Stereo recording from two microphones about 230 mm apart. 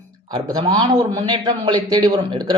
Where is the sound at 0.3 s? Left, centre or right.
Centre.